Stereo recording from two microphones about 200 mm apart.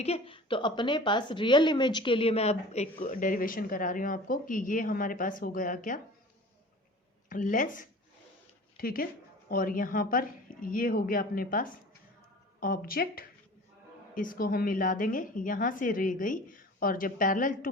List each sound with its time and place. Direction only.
0.0 s a woman's voice: 30° left (ahead or behind)
7.3 s a woman's voice: 40° left (ahead or behind)